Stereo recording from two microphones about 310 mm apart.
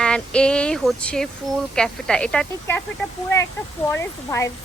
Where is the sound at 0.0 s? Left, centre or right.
Centre.